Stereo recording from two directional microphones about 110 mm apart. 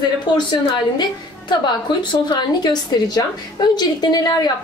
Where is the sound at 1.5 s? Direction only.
40° left (ahead or behind).